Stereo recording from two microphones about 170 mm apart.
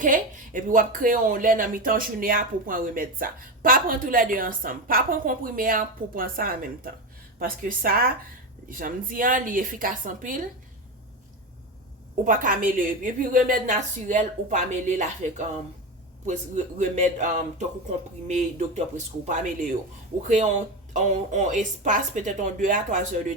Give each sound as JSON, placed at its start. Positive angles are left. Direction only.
{"t": 0.0, "sound": "a woman's voice", "side_deg": -50}
{"t": 12.2, "sound": "a woman's voice", "side_deg": -50}